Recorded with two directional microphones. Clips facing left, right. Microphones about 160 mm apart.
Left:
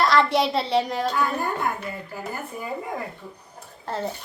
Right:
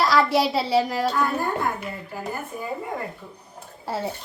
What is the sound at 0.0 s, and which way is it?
Speech, centre (ahead or behind).